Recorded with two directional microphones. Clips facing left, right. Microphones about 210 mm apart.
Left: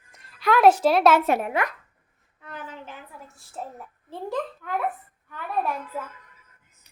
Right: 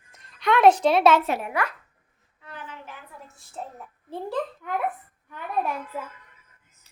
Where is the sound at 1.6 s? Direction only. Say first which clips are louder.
Left 1 dB; 25° left (ahead or behind).